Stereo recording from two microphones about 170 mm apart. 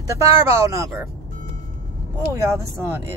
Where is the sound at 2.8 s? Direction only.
15° right (ahead or behind).